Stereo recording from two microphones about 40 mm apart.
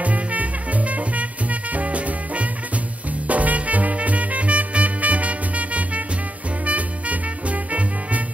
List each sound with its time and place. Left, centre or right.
0.0 s music: right